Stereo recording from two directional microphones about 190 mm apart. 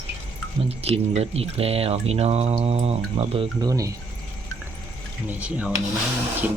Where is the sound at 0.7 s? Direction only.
30° right (ahead or behind).